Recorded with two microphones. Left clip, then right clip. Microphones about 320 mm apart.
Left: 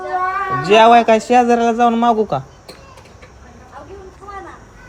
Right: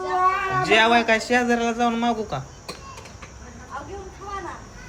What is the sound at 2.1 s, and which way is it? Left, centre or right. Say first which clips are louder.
Speech: left 11 dB; left.